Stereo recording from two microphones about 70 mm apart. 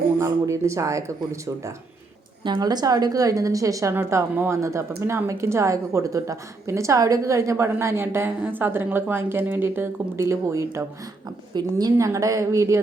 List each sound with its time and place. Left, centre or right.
0.2 s speech: right
2.4 s a woman's voice: right
11.5 s a woman's voice: right
11.9 s speech: right